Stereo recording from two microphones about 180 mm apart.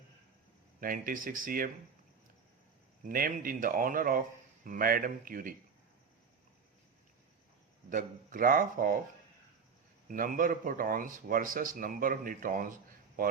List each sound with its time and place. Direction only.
0.8 s speech: 50° right (ahead or behind)
3.0 s speech: 50° right (ahead or behind)
7.9 s speech: 50° right (ahead or behind)
10.1 s speech: 50° right (ahead or behind)